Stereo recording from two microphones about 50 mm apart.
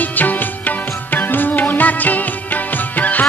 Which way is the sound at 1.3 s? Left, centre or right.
Left.